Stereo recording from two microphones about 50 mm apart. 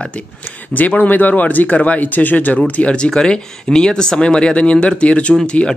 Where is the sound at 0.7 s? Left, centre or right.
Left.